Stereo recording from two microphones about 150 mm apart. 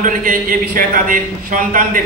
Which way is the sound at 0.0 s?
60° right (ahead or behind).